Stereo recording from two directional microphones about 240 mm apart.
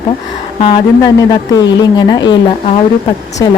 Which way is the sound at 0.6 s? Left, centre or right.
Centre.